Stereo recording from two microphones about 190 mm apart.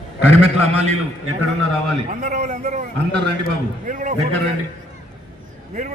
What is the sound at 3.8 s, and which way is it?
Speech, 40° right (ahead or behind).